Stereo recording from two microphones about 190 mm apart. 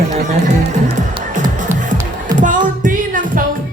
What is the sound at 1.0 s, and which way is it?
Music, 40° right (ahead or behind).